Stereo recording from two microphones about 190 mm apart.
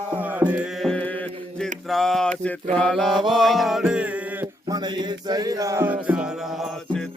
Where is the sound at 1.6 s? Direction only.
Centre (ahead or behind).